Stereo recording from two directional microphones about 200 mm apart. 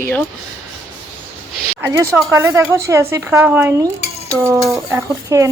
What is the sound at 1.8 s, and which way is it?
A woman's voice, 10° right (ahead or behind).